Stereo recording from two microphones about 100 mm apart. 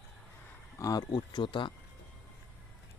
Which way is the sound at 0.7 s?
40° left (ahead or behind).